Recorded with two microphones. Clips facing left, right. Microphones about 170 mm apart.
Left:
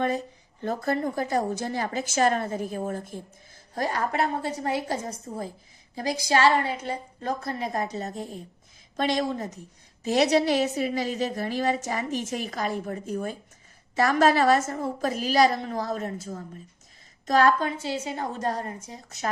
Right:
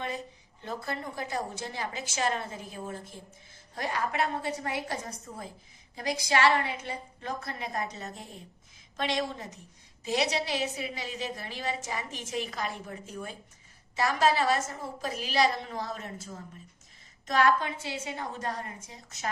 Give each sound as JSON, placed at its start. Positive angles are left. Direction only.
{"t": 0.6, "sound": "a woman's voice", "side_deg": 50}
{"t": 4.6, "sound": "a woman's voice", "side_deg": 30}